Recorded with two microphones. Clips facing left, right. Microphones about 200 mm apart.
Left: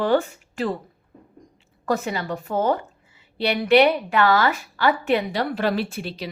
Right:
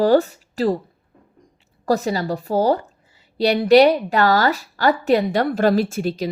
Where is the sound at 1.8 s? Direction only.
35° right (ahead or behind).